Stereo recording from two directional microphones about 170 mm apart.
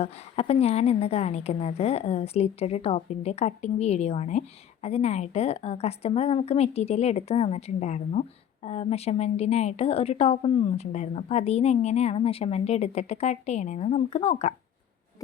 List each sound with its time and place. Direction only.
0.0 s a woman's voice: 35° left (ahead or behind)